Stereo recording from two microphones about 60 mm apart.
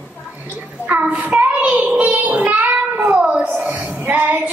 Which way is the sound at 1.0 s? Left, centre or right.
Centre.